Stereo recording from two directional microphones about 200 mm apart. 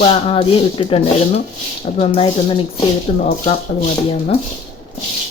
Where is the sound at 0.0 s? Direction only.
30° left (ahead or behind).